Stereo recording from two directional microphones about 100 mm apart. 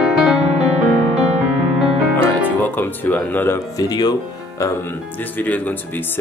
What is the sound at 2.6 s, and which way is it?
Music, 20° left (ahead or behind).